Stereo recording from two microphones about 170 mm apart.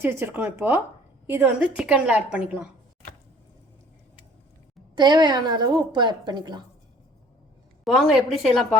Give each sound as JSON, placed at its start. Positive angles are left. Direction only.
{"t": 0.0, "sound": "a woman's voice", "side_deg": -15}
{"t": 4.9, "sound": "a woman's voice", "side_deg": -25}
{"t": 7.9, "sound": "a woman's voice", "side_deg": 0}